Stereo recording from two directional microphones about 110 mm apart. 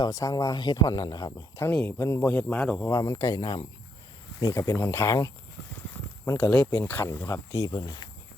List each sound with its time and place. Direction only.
0.0 s speech: 30° left (ahead or behind)
1.7 s speech: 15° left (ahead or behind)
2.8 s speech: 25° left (ahead or behind)
3.4 s speech: 45° left (ahead or behind)
4.4 s speech: 30° left (ahead or behind)
6.3 s speech: 10° left (ahead or behind); by 8.1 s 35° left (ahead or behind)